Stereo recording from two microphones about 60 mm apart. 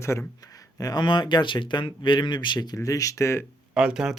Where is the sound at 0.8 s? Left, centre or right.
Left.